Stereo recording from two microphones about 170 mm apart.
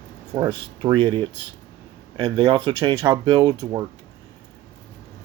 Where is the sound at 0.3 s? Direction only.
25° right (ahead or behind).